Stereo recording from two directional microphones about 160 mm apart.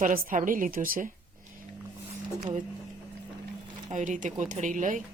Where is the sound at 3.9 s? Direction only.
50° right (ahead or behind).